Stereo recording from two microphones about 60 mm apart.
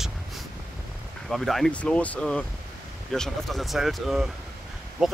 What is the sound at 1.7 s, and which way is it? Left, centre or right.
Speech, left.